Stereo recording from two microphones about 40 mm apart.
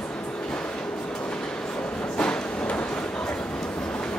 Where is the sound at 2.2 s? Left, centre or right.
Left.